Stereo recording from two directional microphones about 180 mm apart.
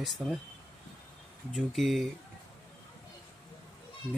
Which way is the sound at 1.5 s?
Centre (ahead or behind).